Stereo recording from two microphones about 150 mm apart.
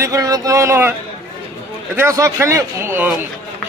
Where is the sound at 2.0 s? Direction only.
20° right (ahead or behind).